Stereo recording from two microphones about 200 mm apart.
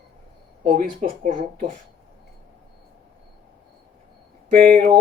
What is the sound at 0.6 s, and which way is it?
Speech, 45° right (ahead or behind).